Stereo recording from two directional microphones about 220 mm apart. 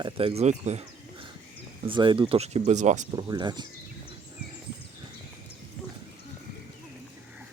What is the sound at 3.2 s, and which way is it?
Speech, 20° right (ahead or behind).